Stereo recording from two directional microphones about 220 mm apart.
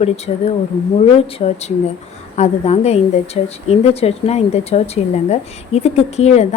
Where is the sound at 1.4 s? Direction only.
25° left (ahead or behind).